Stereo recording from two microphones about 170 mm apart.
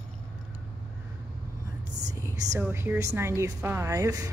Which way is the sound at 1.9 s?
20° right (ahead or behind).